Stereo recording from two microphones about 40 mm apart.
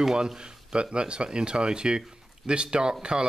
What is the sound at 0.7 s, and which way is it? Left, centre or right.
Speech, right.